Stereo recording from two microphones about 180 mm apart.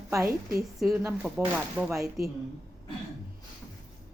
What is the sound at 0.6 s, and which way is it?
A woman's voice, centre (ahead or behind).